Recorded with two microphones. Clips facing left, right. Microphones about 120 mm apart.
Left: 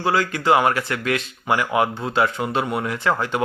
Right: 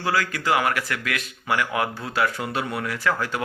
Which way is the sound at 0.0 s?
25° left (ahead or behind).